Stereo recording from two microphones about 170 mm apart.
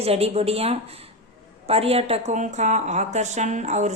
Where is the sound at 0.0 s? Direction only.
35° right (ahead or behind).